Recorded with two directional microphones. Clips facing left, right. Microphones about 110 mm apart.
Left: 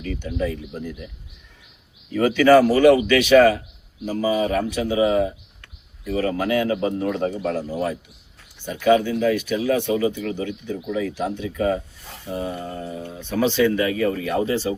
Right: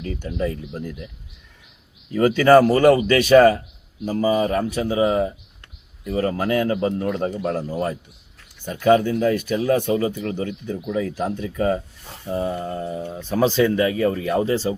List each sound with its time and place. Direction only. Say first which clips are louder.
0.0 s speech: even; 35° right (ahead or behind)
2.1 s speech: right 1 dB; 40° right (ahead or behind)